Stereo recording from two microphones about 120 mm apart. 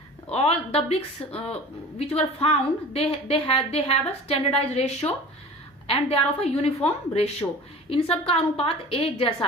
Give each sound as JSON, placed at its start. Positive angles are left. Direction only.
{"t": 0.3, "sound": "a woman's voice", "side_deg": 55}